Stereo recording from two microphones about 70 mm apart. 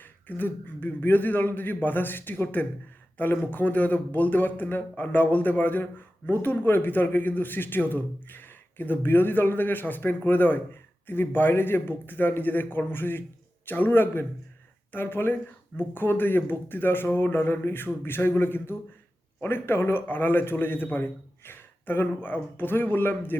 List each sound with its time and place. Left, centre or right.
0.0 s speech: left